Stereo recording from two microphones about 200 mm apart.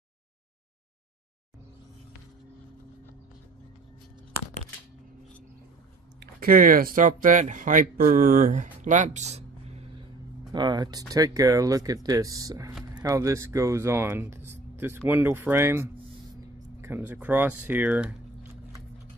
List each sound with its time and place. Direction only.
6.1 s speech: 45° right (ahead or behind)
8.8 s a sound: 40° right (ahead or behind)
10.5 s speech: 20° right (ahead or behind)